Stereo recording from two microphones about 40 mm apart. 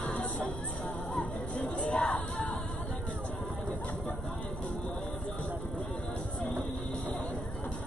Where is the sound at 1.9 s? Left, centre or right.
Left.